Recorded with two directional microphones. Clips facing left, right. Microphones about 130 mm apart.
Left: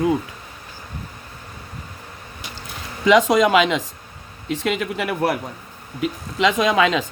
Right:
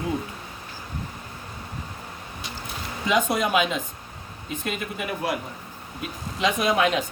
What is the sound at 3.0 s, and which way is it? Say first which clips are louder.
Speech: left 8 dB; 90° left.